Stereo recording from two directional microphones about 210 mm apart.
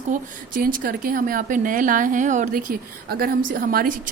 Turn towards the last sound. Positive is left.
turn(degrees=-40)  # may be behind; listen again after turning